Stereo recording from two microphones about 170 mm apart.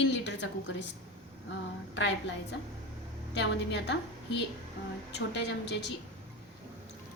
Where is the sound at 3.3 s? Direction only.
90° left.